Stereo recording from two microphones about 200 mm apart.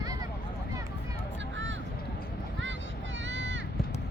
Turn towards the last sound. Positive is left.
turn(degrees=-65)  # may be behind; listen again after turning